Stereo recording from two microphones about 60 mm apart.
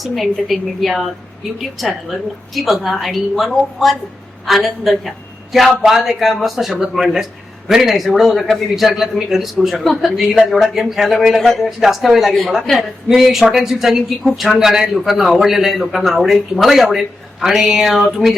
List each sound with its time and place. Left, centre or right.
0.0 s speech: centre